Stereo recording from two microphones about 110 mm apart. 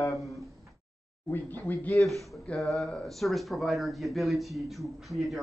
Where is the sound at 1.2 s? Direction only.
20° left (ahead or behind).